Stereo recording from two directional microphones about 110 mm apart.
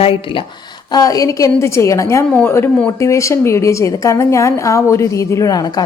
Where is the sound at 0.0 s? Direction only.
55° left (ahead or behind).